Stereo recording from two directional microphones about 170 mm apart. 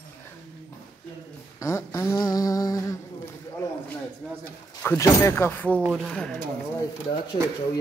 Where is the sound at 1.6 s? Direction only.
15° left (ahead or behind).